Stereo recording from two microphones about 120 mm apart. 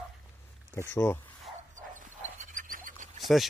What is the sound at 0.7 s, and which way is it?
Speech, 20° left (ahead or behind).